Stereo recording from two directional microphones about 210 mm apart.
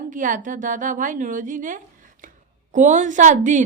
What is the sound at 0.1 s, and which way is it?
A woman's voice, 40° right (ahead or behind).